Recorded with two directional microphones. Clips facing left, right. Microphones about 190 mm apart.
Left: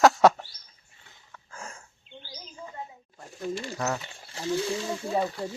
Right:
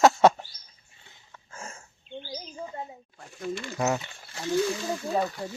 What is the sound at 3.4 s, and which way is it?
Speech, 35° left (ahead or behind).